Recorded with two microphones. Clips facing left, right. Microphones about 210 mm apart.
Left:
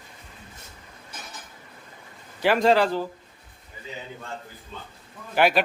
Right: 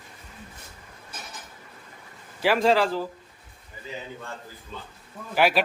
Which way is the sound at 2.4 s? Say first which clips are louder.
Left 1 dB; centre (ahead or behind).